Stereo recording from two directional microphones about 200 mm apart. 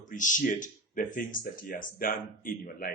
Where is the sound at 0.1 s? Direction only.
40° left (ahead or behind).